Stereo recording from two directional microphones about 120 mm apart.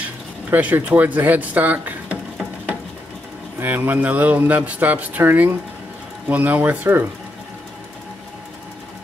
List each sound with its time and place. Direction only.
0.0 s speech: 15° right (ahead or behind)
3.6 s speech: 15° right (ahead or behind)